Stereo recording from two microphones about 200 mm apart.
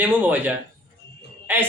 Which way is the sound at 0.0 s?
10° right (ahead or behind).